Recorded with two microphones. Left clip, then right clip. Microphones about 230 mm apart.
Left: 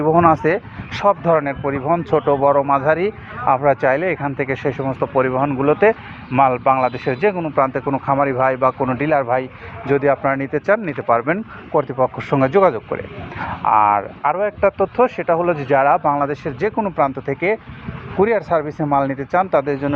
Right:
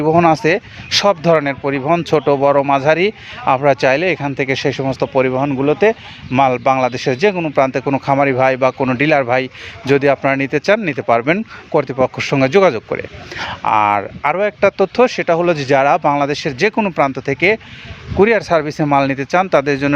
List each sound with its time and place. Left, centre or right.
0.0 s speech: right
4.8 s speech: right
13.5 s speech: right
14.8 s speech: right
16.1 s speech: right